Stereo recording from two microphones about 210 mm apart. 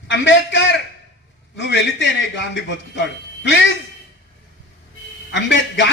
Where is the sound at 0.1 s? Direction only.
60° left (ahead or behind).